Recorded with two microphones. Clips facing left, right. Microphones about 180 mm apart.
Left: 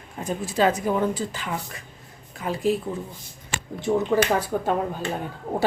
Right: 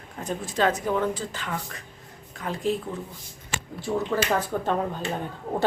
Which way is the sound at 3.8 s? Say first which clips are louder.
Left 5 dB; 15° left (ahead or behind).